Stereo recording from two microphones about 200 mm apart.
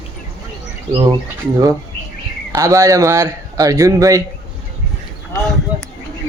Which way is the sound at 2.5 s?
15° right (ahead or behind).